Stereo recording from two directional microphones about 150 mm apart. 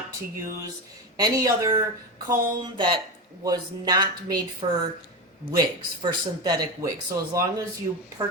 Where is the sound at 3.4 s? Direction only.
25° right (ahead or behind).